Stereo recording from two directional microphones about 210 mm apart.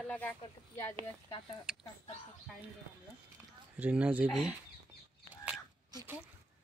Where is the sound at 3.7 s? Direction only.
5° right (ahead or behind).